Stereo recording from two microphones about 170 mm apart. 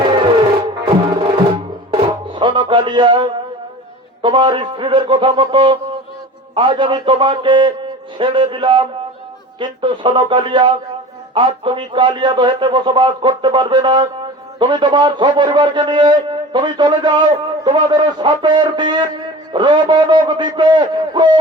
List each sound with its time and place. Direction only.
0.9 s music: 30° right (ahead or behind)
4.2 s a man's voice: 30° right (ahead or behind)